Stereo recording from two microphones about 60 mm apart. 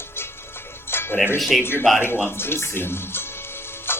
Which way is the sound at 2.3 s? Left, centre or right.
Left.